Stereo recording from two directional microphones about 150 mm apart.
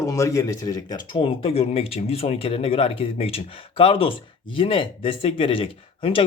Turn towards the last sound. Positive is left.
turn(degrees=40)  # may be behind; listen again after turning